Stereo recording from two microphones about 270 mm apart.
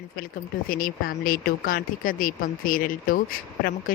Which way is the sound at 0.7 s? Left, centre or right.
Left.